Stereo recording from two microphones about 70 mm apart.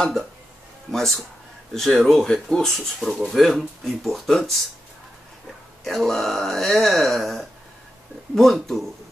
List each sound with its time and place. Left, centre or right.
0.0 s speech: centre
5.9 s speech: centre